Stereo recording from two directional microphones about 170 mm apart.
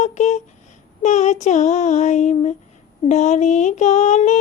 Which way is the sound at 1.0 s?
45° left (ahead or behind).